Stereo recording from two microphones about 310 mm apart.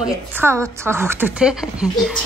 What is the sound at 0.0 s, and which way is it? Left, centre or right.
A woman's voice, centre.